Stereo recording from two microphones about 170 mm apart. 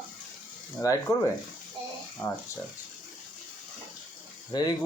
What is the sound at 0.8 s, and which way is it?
Speech, 20° left (ahead or behind).